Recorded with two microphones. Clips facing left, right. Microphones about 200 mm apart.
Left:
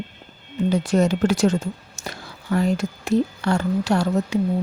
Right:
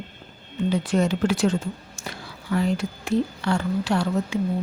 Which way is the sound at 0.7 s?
40° left (ahead or behind).